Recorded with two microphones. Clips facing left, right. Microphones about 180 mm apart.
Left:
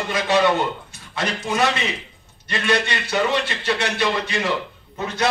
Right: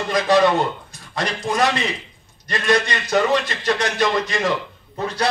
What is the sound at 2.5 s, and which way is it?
A man's voice, 40° right (ahead or behind).